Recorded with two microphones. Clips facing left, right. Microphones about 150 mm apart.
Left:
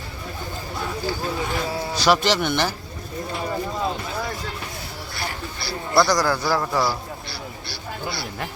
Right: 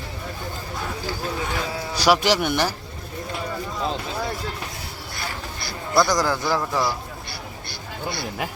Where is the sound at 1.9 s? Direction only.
10° right (ahead or behind).